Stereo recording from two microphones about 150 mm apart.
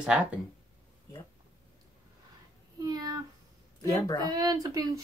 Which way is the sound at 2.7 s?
25° right (ahead or behind).